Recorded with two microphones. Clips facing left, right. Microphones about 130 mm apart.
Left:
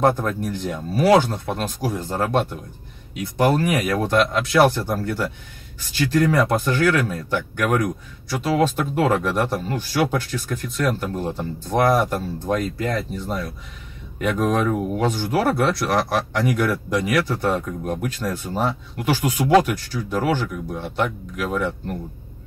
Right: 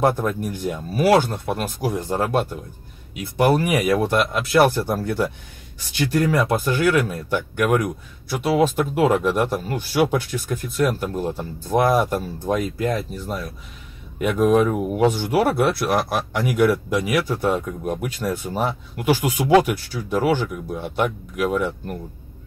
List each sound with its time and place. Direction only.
0.0 s speech: 15° right (ahead or behind)
6.3 s speech: 5° right (ahead or behind)
10.8 s speech: 5° right (ahead or behind)
14.5 s speech: 10° right (ahead or behind)